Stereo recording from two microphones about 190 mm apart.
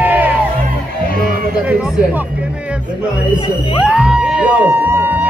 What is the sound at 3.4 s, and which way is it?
Speech, 25° left (ahead or behind).